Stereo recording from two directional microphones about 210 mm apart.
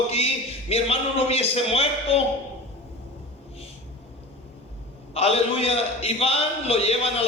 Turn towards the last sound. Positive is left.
turn(degrees=30)  # may be behind; listen again after turning